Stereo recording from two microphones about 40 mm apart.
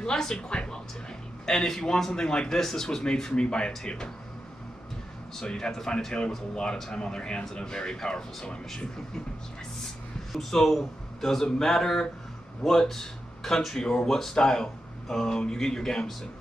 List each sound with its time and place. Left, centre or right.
0.0 s speech: centre
1.4 s speech: centre
5.4 s speech: centre
10.3 s speech: centre
13.7 s speech: centre